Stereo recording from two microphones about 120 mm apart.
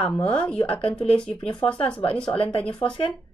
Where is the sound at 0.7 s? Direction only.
50° left (ahead or behind).